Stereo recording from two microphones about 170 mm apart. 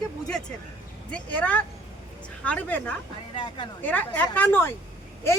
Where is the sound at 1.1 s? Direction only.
10° left (ahead or behind).